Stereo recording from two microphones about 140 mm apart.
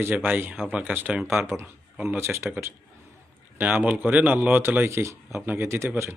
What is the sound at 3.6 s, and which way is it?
Speech, 10° right (ahead or behind).